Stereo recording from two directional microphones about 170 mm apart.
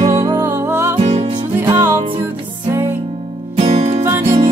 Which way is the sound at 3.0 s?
35° right (ahead or behind).